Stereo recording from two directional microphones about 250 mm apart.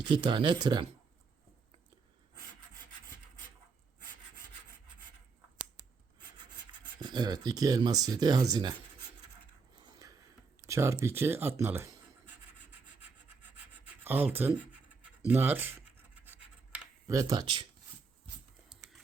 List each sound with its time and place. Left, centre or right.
0.0 s speech: centre
6.3 s rub: centre
10.7 s speech: centre
13.7 s scratch: centre
15.3 s speech: centre
16.7 s computer keyboard: centre